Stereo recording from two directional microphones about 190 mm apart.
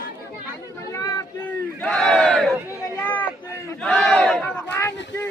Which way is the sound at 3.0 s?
10° left (ahead or behind).